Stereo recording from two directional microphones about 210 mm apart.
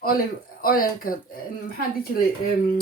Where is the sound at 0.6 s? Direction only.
45° left (ahead or behind).